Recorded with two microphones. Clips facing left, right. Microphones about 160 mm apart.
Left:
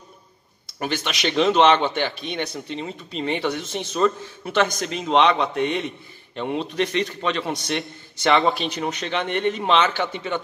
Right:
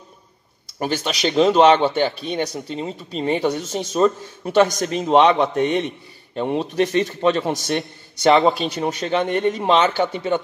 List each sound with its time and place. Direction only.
0.7 s a man's voice: 35° right (ahead or behind)
8.4 s speech: centre (ahead or behind)
9.0 s speech: 40° right (ahead or behind)